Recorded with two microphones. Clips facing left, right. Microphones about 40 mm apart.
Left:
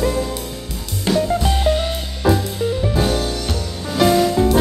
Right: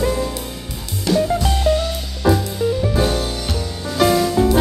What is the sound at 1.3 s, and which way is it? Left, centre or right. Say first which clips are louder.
Music: even; centre.